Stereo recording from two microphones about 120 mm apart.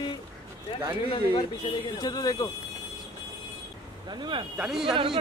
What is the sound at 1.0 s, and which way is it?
Speech, 50° left (ahead or behind).